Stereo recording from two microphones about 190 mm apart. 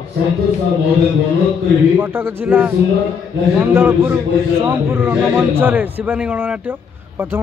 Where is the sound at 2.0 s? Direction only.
10° right (ahead or behind).